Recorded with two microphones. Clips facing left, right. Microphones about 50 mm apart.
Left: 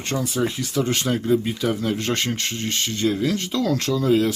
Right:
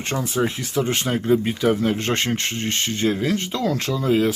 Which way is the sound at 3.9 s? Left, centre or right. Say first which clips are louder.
Even; centre.